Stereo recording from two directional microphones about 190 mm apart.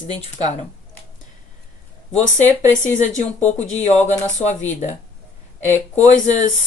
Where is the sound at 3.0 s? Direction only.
40° left (ahead or behind).